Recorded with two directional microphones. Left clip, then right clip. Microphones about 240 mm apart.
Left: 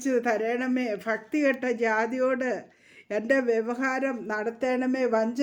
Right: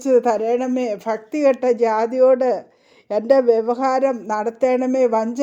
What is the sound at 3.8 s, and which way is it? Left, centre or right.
Speech, centre.